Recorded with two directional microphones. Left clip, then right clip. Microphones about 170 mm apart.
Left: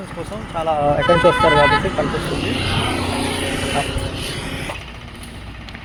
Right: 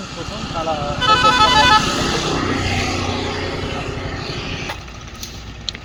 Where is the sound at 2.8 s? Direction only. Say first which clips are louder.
Even; 55° left (ahead or behind).